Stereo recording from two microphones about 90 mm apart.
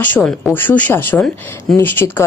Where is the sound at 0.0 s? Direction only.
20° left (ahead or behind).